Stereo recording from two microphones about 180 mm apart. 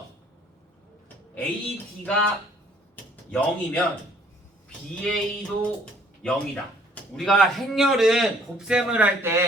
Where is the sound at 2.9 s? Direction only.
10° left (ahead or behind).